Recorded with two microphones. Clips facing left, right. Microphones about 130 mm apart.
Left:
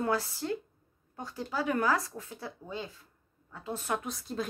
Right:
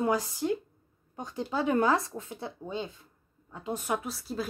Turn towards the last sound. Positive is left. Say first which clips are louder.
# right 2 dB
turn(degrees=-5)  # may be behind; listen again after turning